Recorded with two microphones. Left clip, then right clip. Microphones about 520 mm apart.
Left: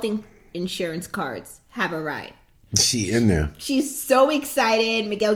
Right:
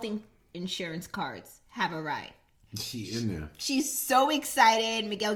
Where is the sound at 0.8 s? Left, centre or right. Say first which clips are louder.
Left 9 dB; right.